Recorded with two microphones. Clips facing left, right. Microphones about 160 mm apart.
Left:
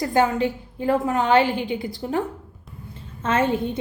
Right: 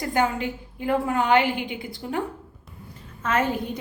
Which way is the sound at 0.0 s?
20° left (ahead or behind).